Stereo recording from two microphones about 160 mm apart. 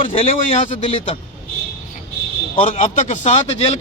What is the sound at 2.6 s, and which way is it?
Speech, 50° left (ahead or behind).